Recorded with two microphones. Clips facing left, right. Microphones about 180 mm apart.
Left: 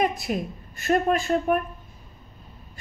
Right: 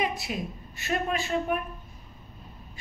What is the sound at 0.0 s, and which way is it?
A woman's voice, 50° left (ahead or behind).